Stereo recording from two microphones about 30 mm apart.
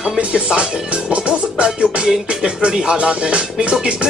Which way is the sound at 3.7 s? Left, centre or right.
Right.